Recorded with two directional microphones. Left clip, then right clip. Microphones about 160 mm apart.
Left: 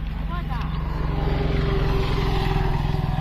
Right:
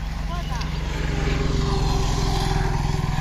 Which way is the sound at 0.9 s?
55° right (ahead or behind).